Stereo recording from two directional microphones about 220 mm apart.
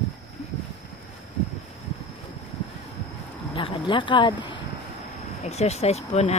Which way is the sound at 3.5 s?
25° left (ahead or behind).